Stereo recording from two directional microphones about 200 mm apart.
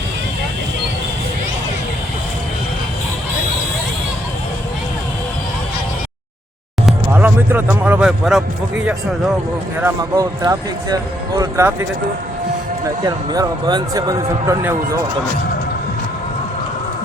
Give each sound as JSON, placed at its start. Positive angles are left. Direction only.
{"t": 6.8, "sound": "speech", "side_deg": -10}
{"t": 9.8, "sound": "speech", "side_deg": -15}
{"t": 13.0, "sound": "speech", "side_deg": -20}